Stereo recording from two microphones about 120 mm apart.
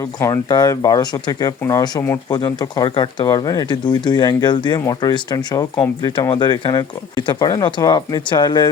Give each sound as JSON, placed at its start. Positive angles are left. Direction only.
{"t": 0.2, "sound": "speech", "side_deg": 30}